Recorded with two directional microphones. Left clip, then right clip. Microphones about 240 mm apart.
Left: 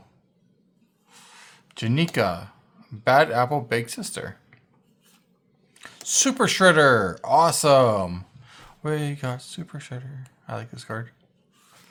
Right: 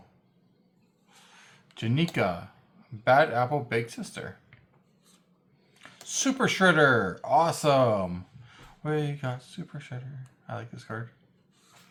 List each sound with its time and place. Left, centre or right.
1.2 s a sound: left
1.7 s speech: left
5.8 s speech: left